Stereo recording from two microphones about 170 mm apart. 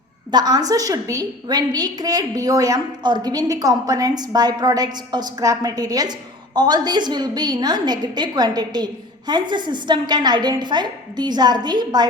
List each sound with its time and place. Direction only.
0.3 s a woman's voice: 25° right (ahead or behind)